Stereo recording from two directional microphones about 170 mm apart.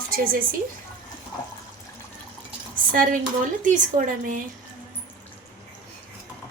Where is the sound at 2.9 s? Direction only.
55° right (ahead or behind).